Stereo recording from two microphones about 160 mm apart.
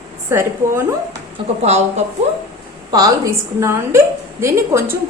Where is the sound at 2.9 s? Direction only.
20° right (ahead or behind).